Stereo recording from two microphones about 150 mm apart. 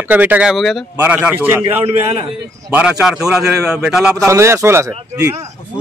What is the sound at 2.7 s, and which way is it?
A man's voice, 5° right (ahead or behind).